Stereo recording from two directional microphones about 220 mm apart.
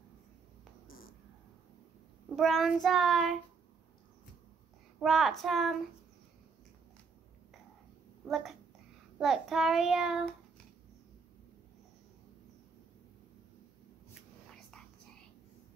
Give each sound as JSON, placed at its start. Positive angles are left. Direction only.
{"t": 0.8, "sound": "a sound", "side_deg": 40}
{"t": 2.3, "sound": "child singing", "side_deg": 0}
{"t": 5.0, "sound": "child singing", "side_deg": 0}
{"t": 8.3, "sound": "child singing", "side_deg": 0}